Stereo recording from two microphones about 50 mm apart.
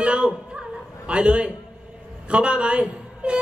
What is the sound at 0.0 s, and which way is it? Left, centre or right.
Music, right.